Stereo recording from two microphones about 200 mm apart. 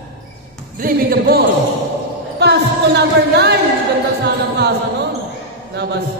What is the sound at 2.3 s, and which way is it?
Music, 55° right (ahead or behind).